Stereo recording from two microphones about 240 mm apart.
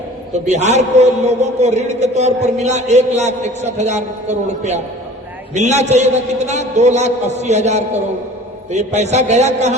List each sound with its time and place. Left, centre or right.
0.3 s a man's voice: right